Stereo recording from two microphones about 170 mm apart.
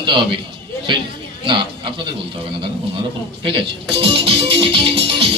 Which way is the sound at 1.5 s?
30° right (ahead or behind).